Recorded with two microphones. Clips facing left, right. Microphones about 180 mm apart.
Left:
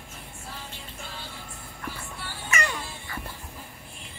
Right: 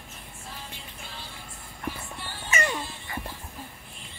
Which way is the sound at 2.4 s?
20° right (ahead or behind).